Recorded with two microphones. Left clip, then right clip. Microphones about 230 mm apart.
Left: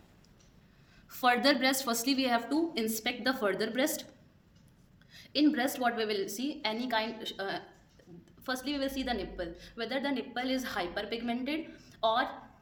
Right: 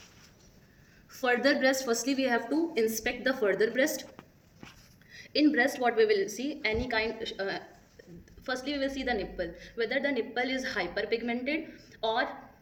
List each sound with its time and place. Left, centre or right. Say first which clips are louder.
1.1 s a woman's voice: even; left
5.1 s a woman's voice: right 3 dB; left